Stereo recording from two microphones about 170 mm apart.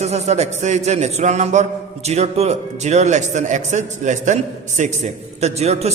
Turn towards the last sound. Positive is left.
turn(degrees=-40)  # may be behind; listen again after turning